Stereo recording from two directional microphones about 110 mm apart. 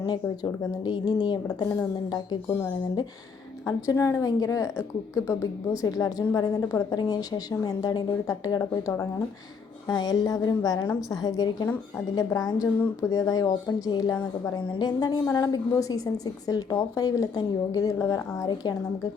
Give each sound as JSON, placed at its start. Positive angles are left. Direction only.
{"t": 0.9, "sound": "a woman's voice", "side_deg": 40}
{"t": 3.7, "sound": "a woman's voice", "side_deg": 30}